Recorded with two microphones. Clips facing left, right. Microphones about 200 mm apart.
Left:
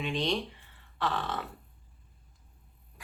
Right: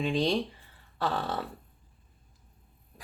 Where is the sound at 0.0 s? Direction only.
35° right (ahead or behind).